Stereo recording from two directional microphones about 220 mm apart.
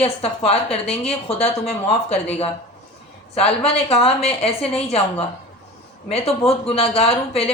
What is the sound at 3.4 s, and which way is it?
A woman's voice, 25° left (ahead or behind).